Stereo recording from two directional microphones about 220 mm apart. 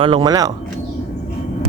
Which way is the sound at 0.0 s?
20° right (ahead or behind).